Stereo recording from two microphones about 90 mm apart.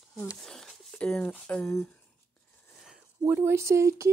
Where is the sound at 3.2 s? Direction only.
25° right (ahead or behind).